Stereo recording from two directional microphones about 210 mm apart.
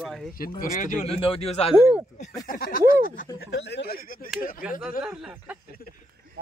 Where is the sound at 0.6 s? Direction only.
40° left (ahead or behind).